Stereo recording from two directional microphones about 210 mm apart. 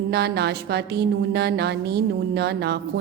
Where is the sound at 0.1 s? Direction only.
50° right (ahead or behind).